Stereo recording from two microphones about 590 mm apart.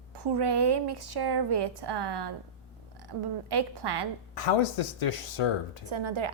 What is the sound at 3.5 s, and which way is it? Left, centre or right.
Speech, right.